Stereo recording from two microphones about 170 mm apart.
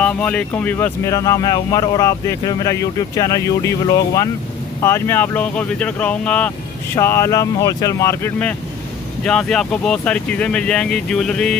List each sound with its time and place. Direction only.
0.0 s speech: 5° left (ahead or behind)